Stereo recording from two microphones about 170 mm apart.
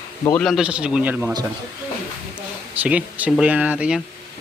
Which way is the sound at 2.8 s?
10° right (ahead or behind).